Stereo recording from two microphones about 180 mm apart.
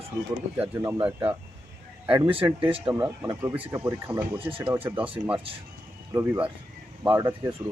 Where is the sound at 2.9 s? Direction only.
10° right (ahead or behind).